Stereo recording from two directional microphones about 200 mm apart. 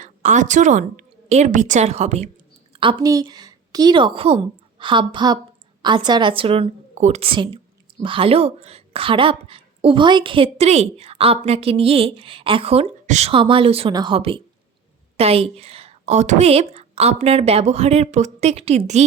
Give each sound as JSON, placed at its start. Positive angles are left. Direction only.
{"t": 0.0, "sound": "a woman's voice", "side_deg": -35}
{"t": 2.8, "sound": "a woman's voice", "side_deg": -20}